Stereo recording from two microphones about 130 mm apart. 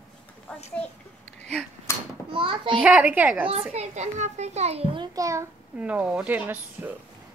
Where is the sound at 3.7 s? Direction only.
60° right (ahead or behind).